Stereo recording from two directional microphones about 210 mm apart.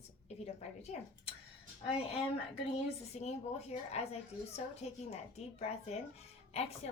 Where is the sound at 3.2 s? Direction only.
30° left (ahead or behind).